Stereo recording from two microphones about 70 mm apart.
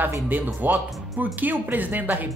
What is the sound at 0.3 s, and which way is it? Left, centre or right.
A woman's voice, right.